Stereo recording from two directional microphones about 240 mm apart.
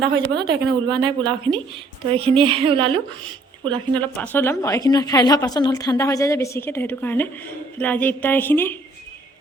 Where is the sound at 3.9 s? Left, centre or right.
Centre.